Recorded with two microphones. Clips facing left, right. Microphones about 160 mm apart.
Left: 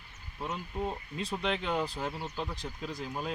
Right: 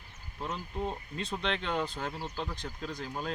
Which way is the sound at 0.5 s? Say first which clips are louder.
Left 1 dB; 5° left (ahead or behind).